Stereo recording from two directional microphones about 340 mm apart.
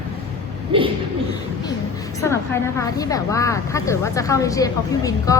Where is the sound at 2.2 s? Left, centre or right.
Centre.